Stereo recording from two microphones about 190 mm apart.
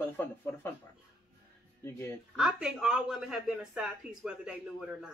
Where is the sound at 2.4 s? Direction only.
5° right (ahead or behind).